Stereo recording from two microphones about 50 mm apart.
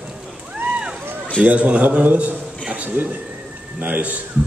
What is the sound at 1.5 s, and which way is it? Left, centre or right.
Speech, right.